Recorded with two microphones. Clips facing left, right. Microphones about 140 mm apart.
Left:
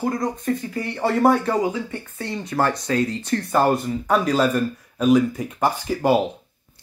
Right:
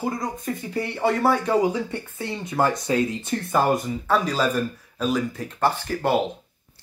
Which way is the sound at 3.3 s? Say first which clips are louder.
Left 7 dB; 15° right (ahead or behind).